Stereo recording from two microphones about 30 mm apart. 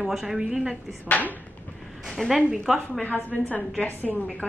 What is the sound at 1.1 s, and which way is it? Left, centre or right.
Speech, left.